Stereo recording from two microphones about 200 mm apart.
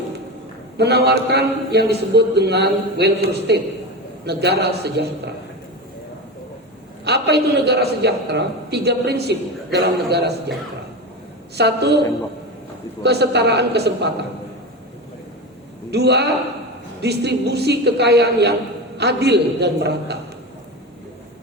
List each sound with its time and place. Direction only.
0.8 s a man's voice: 55° right (ahead or behind)
7.0 s a man's voice: 55° right (ahead or behind)
11.5 s a man's voice: 55° right (ahead or behind)
15.9 s a man's voice: 55° right (ahead or behind)